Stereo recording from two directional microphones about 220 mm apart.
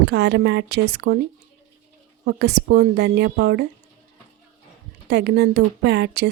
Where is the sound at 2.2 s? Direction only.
50° right (ahead or behind).